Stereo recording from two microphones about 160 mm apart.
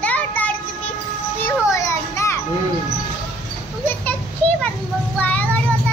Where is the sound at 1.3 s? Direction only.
15° left (ahead or behind).